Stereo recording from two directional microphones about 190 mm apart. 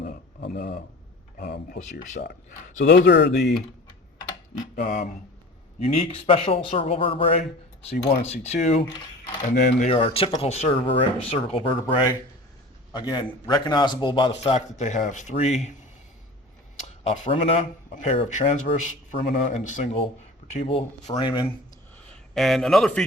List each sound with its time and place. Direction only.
0.0 s a sound: 45° left (ahead or behind)
1.4 s speech: 55° left (ahead or behind)
4.7 s speech: 45° left (ahead or behind)
5.8 s a man's voice: 30° left (ahead or behind)
17.0 s a man's voice: 35° left (ahead or behind)
22.1 s a man's voice: centre (ahead or behind)